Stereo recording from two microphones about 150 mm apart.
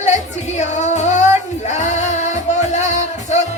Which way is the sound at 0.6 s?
50° left (ahead or behind).